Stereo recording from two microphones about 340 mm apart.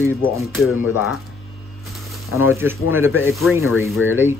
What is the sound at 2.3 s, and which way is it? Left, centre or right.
Speech, centre.